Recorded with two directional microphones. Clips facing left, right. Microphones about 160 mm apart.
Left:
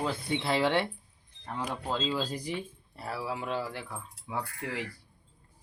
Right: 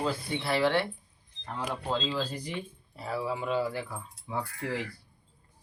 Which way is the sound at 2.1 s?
10° left (ahead or behind).